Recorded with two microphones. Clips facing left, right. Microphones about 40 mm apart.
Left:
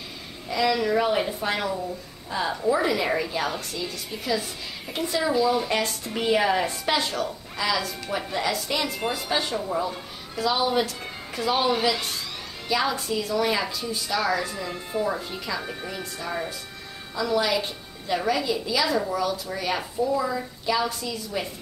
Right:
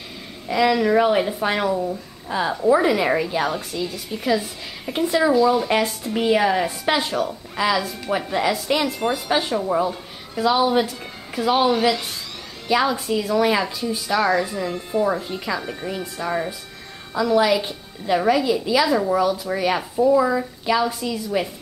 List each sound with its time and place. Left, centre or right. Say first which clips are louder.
0.5 s a woman's voice: right 5 dB; centre
5.3 s speech: right 3 dB; centre
5.7 s a woman's voice: right 5 dB; centre
6.0 s a woman's voice: right 3 dB; centre
12.6 s a woman's voice: right 5 dB; centre